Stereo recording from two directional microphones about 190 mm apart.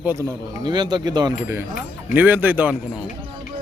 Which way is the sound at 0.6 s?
25° right (ahead or behind).